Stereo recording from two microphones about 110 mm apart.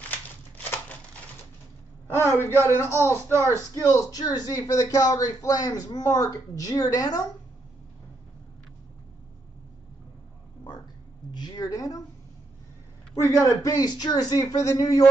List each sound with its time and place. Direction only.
0.6 s a sound: 15° left (ahead or behind)
2.0 s a sound: 20° left (ahead or behind)
2.6 s a man's voice: 20° left (ahead or behind)
3.3 s speech: 25° right (ahead or behind)
3.7 s speech: 30° left (ahead or behind)
11.3 s speech: 40° left (ahead or behind)
13.1 s speech: 30° left (ahead or behind)